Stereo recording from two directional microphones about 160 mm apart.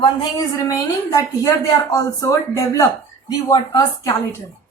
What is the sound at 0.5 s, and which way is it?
A woman's voice, 20° left (ahead or behind).